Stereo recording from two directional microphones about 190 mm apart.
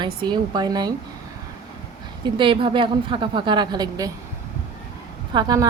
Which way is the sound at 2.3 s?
25° right (ahead or behind).